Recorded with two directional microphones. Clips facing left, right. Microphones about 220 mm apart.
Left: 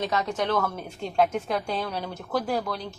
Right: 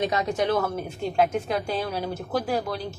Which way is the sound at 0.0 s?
10° right (ahead or behind).